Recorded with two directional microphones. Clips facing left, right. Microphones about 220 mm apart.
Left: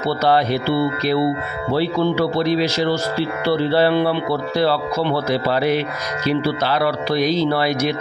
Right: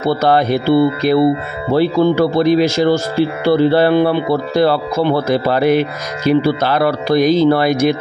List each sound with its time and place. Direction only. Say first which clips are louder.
0.0 s speech: right 4 dB; 50° right (ahead or behind)